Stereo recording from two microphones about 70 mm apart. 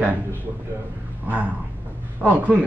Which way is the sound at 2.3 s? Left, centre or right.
Right.